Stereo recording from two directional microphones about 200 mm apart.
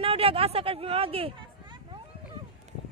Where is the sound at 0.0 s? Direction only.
30° right (ahead or behind).